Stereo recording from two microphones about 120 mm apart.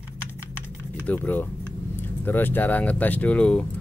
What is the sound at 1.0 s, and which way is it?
Speech, 15° left (ahead or behind).